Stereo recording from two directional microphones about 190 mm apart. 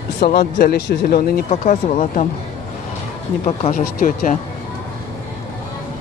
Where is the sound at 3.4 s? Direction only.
40° left (ahead or behind).